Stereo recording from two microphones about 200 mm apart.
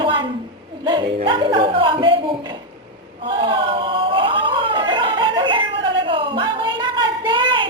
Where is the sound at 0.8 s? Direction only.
25° right (ahead or behind).